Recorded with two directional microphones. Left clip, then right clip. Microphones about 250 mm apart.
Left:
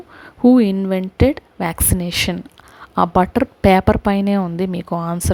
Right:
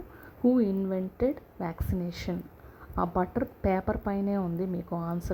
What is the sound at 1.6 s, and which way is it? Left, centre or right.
A woman's voice, left.